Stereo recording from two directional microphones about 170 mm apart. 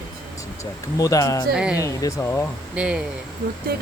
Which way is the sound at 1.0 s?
20° left (ahead or behind).